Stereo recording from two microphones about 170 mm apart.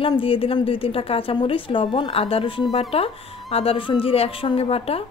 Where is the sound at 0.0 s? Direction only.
30° left (ahead or behind).